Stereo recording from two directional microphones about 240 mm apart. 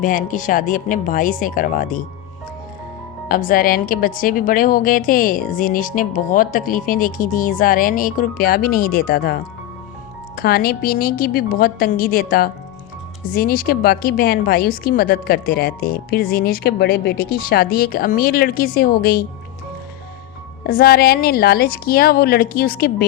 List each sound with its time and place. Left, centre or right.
0.0 s a woman's voice: left
3.2 s a woman's voice: left
20.7 s a woman's voice: left